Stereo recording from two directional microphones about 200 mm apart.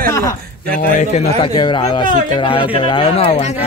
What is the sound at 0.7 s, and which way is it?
Speech, 35° left (ahead or behind).